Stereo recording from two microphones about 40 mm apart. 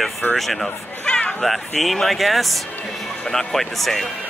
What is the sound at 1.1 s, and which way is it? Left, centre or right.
Speech, centre.